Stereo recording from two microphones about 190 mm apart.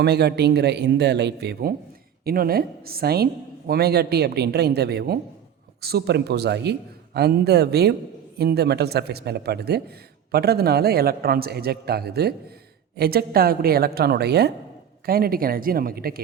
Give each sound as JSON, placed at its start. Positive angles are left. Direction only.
{"t": 0.0, "sound": "a man's voice", "side_deg": -60}